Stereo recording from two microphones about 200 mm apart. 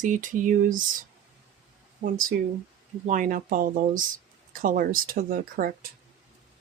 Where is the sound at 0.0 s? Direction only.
40° right (ahead or behind).